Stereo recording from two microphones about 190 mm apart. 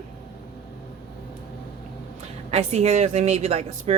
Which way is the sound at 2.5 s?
35° right (ahead or behind).